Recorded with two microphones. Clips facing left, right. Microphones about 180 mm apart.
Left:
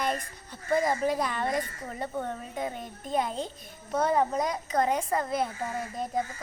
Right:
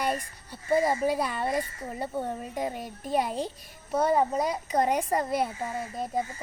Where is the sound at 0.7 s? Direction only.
5° right (ahead or behind).